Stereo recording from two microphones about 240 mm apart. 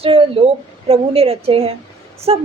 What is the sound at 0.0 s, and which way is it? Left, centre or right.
A woman's voice, right.